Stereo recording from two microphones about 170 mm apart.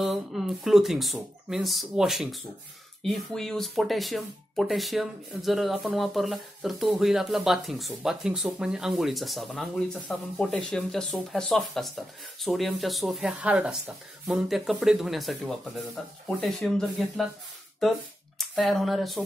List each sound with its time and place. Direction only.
0.0 s speech: centre (ahead or behind)
18.4 s speech: centre (ahead or behind)